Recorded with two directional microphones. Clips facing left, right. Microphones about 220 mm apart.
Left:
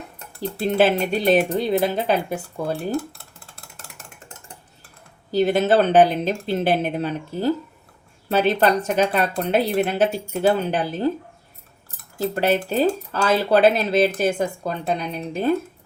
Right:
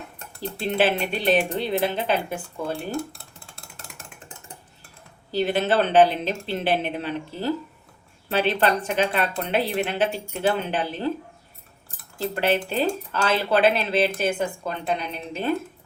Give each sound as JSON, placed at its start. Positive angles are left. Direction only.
{"t": 0.6, "sound": "speech", "side_deg": 45}
{"t": 5.3, "sound": "speech", "side_deg": 45}
{"t": 12.3, "sound": "speech", "side_deg": 40}